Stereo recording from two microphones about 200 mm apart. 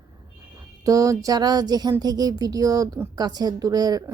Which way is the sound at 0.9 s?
15° right (ahead or behind).